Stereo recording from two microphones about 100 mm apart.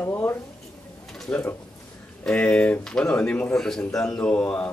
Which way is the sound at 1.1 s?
5° left (ahead or behind).